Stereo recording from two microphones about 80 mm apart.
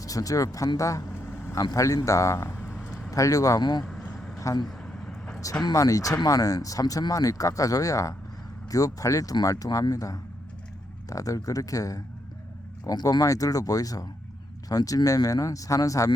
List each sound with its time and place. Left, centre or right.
0.0 s speech: left
2.6 s vehicle: centre
3.1 s speech: left
3.6 s speech: left
4.6 s vehicle: centre
5.7 s speech: left